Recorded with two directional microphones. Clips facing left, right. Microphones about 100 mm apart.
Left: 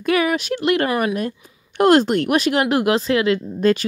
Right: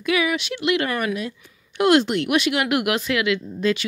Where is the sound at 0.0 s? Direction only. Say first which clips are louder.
Left 3 dB; 45° left (ahead or behind).